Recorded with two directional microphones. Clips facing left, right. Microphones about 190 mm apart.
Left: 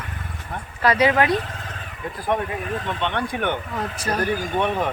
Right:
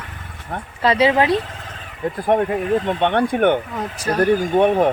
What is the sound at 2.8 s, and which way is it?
Speech, 55° right (ahead or behind).